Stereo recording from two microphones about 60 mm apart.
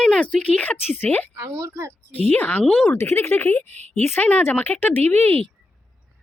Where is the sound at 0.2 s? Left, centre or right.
Centre.